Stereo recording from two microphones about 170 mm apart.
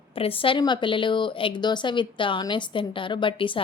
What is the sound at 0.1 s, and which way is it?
A woman's voice, 35° left (ahead or behind).